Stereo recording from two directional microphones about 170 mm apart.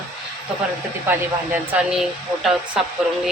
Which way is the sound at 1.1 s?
10° right (ahead or behind).